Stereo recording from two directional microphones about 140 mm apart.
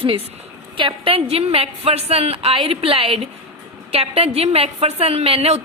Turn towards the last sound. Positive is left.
turn(degrees=-45)  # may be behind; listen again after turning